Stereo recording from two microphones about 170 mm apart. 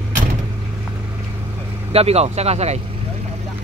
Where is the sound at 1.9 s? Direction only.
40° right (ahead or behind).